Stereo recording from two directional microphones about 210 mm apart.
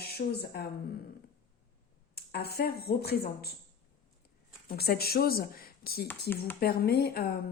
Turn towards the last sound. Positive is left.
turn(degrees=45)  # may be behind; listen again after turning